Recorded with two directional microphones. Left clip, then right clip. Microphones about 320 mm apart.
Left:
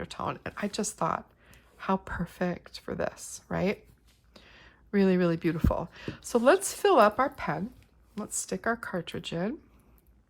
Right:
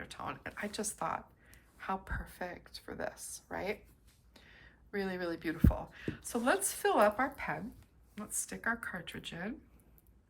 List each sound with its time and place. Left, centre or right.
0.0 s speech: centre